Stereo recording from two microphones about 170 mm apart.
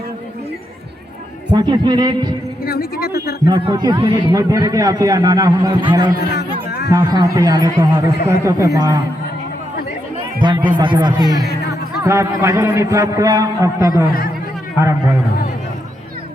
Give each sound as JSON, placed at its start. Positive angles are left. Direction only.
{"t": 1.5, "sound": "a man's voice", "side_deg": -25}
{"t": 2.6, "sound": "speech", "side_deg": 65}
{"t": 3.5, "sound": "a man's voice", "side_deg": -25}
{"t": 6.1, "sound": "music", "side_deg": 65}
{"t": 6.9, "sound": "a man's voice", "side_deg": -20}
{"t": 10.4, "sound": "a man's voice", "side_deg": -30}